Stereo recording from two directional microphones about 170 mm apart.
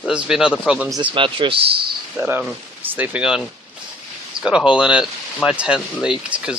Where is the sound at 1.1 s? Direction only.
30° right (ahead or behind).